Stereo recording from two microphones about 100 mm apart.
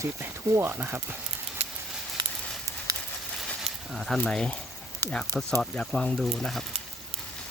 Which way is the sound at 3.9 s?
Centre (ahead or behind).